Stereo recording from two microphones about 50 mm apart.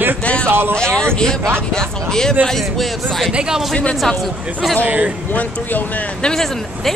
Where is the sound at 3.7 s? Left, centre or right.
Centre.